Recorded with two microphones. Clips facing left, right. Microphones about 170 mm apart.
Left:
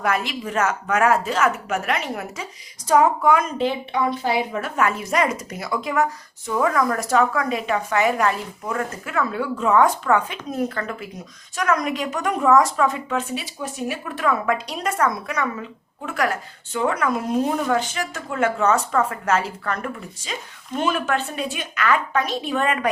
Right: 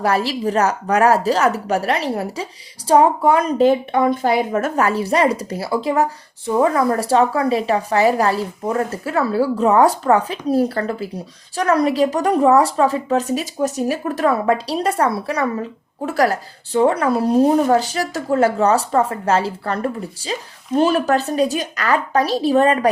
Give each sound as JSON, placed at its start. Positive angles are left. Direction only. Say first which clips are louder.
{"t": 0.0, "sound": "speech", "louder": "right 6 dB", "side_deg": -35}